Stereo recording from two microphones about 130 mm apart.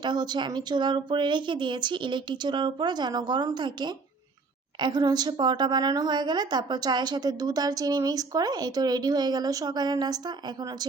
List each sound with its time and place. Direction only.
0.0 s a woman's voice: 35° right (ahead or behind)